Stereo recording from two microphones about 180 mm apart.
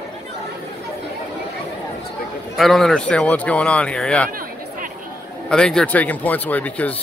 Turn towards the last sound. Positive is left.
turn(degrees=10)  # may be behind; listen again after turning